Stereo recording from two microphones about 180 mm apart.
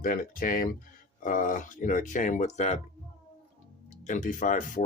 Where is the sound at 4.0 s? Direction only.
45° left (ahead or behind).